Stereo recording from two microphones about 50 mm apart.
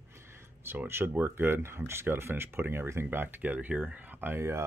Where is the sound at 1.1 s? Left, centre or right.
Right.